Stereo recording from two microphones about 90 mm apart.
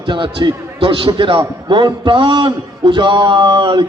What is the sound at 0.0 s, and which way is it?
A man's voice, 65° right (ahead or behind).